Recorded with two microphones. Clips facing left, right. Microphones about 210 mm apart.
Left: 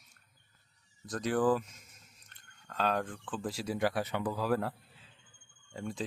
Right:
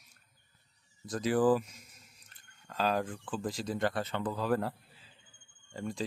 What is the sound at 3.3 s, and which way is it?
Speech, 5° left (ahead or behind).